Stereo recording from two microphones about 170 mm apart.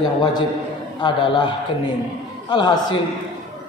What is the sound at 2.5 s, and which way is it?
Speech, 25° left (ahead or behind).